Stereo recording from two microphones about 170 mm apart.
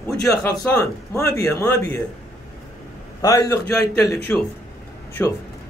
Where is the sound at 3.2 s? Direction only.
20° left (ahead or behind).